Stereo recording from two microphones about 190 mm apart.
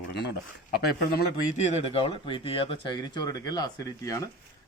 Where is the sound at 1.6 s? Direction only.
30° left (ahead or behind).